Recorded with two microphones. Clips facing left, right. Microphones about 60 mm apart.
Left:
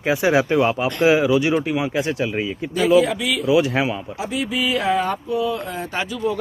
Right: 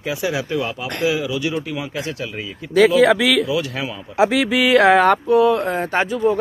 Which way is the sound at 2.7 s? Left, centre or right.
Right.